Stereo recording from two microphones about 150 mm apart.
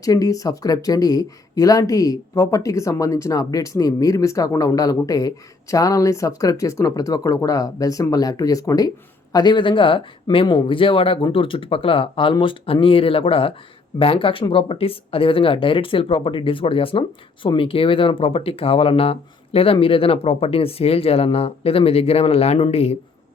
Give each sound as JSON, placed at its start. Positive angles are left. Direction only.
{"t": 0.0, "sound": "speech", "side_deg": 25}